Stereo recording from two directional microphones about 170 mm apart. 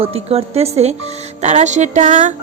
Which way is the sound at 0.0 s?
35° right (ahead or behind).